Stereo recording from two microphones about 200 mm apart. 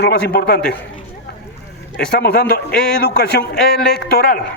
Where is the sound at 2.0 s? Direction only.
50° left (ahead or behind).